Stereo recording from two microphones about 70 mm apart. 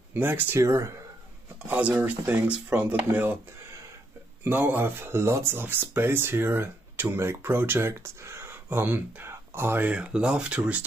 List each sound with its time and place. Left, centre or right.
0.1 s speech: right
0.6 s speech: right
1.7 s speech: right
4.5 s speech: right
9.9 s speech: centre